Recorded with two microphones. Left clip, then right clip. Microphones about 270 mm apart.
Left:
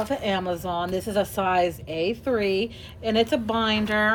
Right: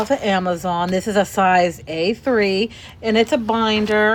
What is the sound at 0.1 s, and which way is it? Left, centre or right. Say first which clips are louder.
A woman's voice: right 7 dB; right.